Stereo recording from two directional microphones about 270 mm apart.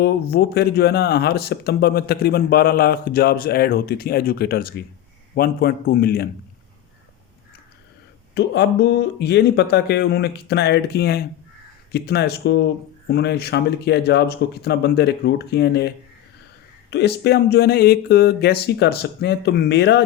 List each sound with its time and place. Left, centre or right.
0.0 s speech: left
8.4 s speech: left
16.9 s speech: left